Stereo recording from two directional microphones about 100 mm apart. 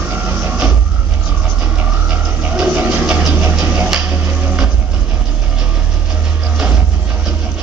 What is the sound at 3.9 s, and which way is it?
Music, 15° right (ahead or behind).